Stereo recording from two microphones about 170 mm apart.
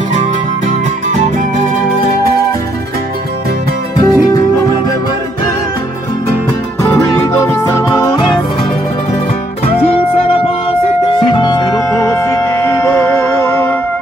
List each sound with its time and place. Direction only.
4.0 s music: 20° left (ahead or behind)
6.8 s music: 15° left (ahead or behind)
11.1 s music: 30° left (ahead or behind)